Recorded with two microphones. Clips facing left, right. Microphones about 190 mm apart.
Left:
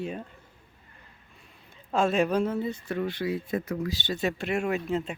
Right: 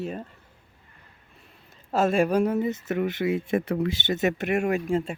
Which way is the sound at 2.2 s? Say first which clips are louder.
Right 3 dB; 10° right (ahead or behind).